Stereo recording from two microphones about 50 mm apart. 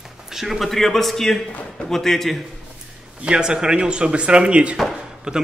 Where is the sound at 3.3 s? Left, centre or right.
Centre.